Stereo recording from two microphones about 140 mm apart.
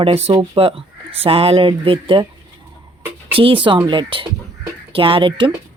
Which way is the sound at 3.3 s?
40° right (ahead or behind).